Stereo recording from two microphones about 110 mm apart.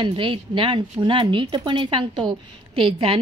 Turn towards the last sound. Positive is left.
turn(degrees=-55)  # may be behind; listen again after turning